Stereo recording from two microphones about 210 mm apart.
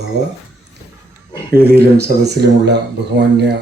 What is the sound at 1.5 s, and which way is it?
Speech, 50° right (ahead or behind).